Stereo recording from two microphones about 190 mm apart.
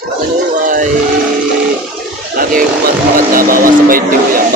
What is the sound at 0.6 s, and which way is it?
Speech, 45° right (ahead or behind).